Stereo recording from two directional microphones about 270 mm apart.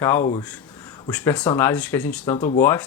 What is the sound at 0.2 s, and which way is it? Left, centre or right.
Speech, left.